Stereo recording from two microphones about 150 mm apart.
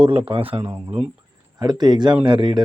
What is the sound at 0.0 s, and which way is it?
Speech, 40° right (ahead or behind).